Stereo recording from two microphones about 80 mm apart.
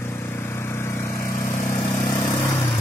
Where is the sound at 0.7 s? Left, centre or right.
Left.